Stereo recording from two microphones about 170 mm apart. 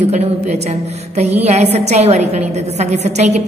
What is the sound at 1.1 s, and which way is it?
A woman's voice, 40° right (ahead or behind).